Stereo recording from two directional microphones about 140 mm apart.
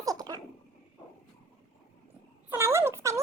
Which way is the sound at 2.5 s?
20° right (ahead or behind).